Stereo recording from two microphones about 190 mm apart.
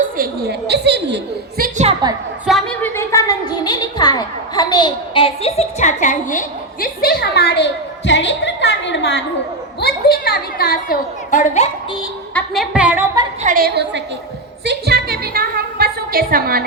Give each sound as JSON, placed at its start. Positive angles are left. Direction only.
{"t": 0.0, "sound": "a woman's voice", "side_deg": -55}
{"t": 1.8, "sound": "a woman's voice", "side_deg": -25}
{"t": 2.5, "sound": "a woman's voice", "side_deg": 0}
{"t": 9.8, "sound": "a woman's voice", "side_deg": 55}
{"t": 12.3, "sound": "a woman's voice", "side_deg": 5}
{"t": 12.7, "sound": "a woman's voice", "side_deg": -5}
{"t": 13.4, "sound": "a woman's voice", "side_deg": -45}
{"t": 14.6, "sound": "music", "side_deg": -60}